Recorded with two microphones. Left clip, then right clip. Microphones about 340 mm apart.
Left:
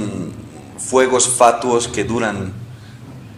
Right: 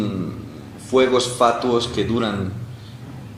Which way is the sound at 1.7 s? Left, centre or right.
Left.